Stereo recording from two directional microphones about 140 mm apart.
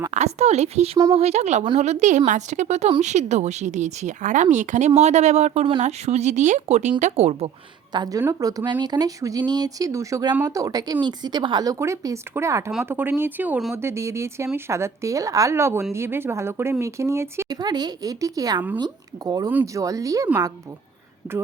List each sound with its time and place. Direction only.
0.1 s speech: 50° right (ahead or behind)
7.9 s speech: 25° right (ahead or behind)
19.5 s speech: 15° right (ahead or behind)